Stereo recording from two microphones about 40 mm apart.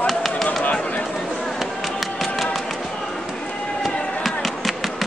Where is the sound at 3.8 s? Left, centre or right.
Centre.